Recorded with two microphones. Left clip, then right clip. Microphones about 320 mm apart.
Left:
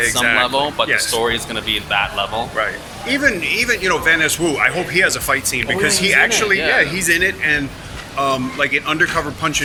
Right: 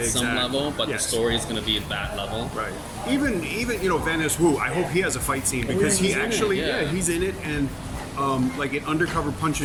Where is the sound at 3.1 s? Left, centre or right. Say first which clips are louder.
Left 9 dB; centre.